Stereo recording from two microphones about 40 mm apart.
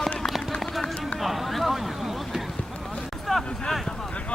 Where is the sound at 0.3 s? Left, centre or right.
Centre.